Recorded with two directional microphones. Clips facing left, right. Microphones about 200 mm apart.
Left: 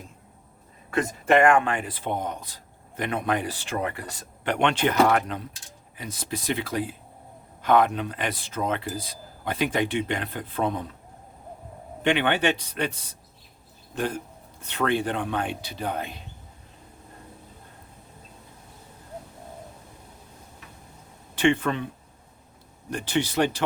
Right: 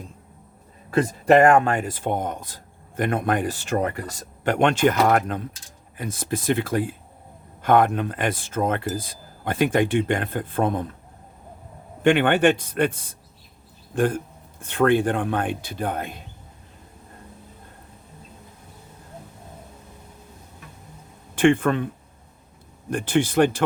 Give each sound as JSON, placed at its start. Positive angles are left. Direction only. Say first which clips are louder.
{"t": 0.9, "sound": "speech", "louder": "right 5 dB", "side_deg": -35}
{"t": 12.0, "sound": "speech", "louder": "right 6 dB", "side_deg": -50}
{"t": 21.3, "sound": "speech", "louder": "right 4 dB", "side_deg": -50}
{"t": 22.9, "sound": "speech", "louder": "right 5 dB", "side_deg": -50}